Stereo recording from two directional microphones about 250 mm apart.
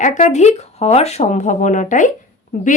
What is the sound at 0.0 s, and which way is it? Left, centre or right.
Speech, left.